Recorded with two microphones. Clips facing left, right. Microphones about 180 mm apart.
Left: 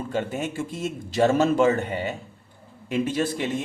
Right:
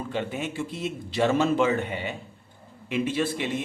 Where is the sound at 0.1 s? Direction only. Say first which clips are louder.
Left 4 dB; 45° left (ahead or behind).